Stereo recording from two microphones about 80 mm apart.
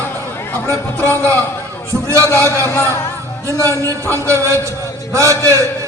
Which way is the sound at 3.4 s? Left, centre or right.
Right.